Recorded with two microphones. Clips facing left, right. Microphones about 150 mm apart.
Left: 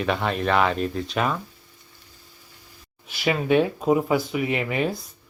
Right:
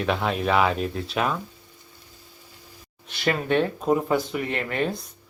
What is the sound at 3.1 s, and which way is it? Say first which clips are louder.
Speech: left 2 dB; 5° left (ahead or behind).